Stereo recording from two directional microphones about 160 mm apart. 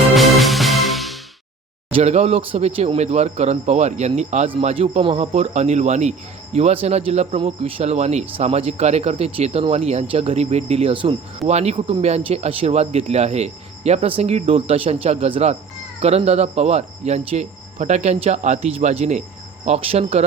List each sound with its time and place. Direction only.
0.1 s music: centre (ahead or behind)
1.9 s speech: 40° right (ahead or behind)